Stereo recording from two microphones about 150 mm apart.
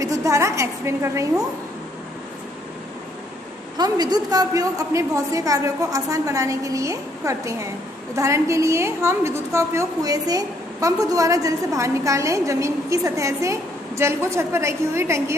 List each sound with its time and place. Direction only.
0.0 s a woman's voice: 20° right (ahead or behind)
3.8 s a woman's voice: 25° right (ahead or behind)